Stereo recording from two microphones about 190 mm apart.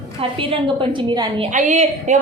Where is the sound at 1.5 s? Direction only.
40° right (ahead or behind).